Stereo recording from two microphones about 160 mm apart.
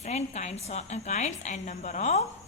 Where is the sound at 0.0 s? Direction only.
45° left (ahead or behind).